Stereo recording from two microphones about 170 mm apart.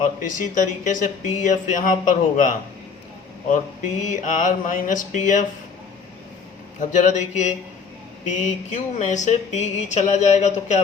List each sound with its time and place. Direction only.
0.2 s speech: 50° left (ahead or behind)
4.1 s speech: 50° left (ahead or behind)
6.7 s speech: 45° left (ahead or behind)